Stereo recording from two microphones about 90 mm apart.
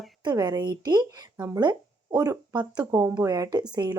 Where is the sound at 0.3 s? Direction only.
50° right (ahead or behind).